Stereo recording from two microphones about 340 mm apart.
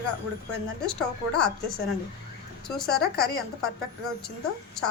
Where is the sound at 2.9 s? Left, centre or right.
Left.